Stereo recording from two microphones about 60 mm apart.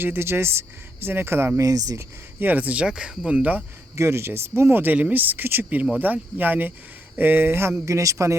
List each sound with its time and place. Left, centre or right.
0.0 s speech: right
1.5 s speech: right
2.4 s speech: right
3.9 s speech: right
7.9 s speech: right